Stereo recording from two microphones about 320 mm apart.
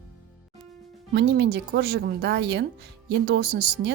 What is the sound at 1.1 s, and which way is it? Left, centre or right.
Speech, right.